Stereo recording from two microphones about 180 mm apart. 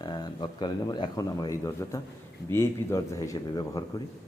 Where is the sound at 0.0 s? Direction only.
25° left (ahead or behind).